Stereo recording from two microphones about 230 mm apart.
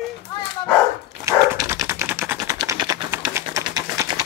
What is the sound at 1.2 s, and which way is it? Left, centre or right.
Dog, centre.